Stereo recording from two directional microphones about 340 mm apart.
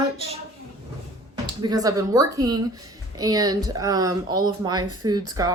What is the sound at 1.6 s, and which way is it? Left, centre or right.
Speech, centre.